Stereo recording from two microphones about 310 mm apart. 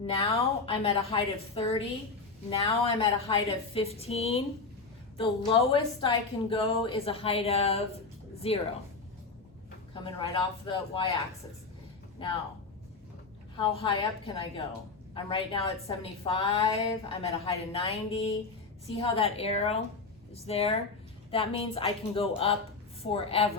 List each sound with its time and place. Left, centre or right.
0.0 s a woman's voice: centre
9.9 s a woman's voice: centre
13.6 s a woman's voice: centre